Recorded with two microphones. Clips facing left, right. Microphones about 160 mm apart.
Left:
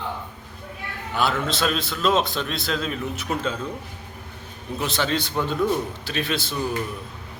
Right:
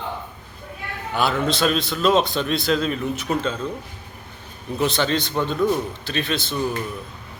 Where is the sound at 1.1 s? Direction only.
Centre (ahead or behind).